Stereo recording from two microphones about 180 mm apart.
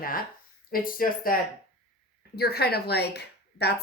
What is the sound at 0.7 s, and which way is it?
A woman's voice, 50° left (ahead or behind).